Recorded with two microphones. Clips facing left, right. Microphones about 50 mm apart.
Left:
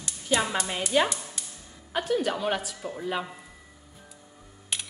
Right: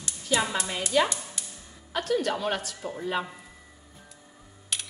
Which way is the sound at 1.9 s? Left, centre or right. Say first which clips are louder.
Even; centre.